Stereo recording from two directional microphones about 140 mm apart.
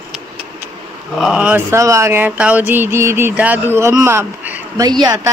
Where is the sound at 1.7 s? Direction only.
20° right (ahead or behind).